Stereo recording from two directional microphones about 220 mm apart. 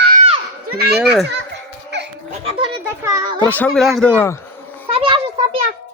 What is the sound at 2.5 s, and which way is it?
Children playing, 25° right (ahead or behind).